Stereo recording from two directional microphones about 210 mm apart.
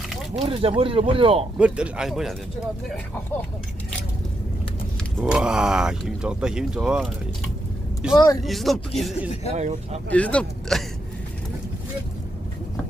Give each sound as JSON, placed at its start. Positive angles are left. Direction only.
{"t": 0.3, "sound": "speech", "side_deg": -25}
{"t": 1.5, "sound": "speech", "side_deg": -5}
{"t": 5.1, "sound": "speech", "side_deg": 0}
{"t": 8.1, "sound": "speech", "side_deg": 20}
{"t": 8.4, "sound": "speech", "side_deg": 0}
{"t": 9.6, "sound": "speech", "side_deg": -35}
{"t": 10.1, "sound": "speech", "side_deg": 5}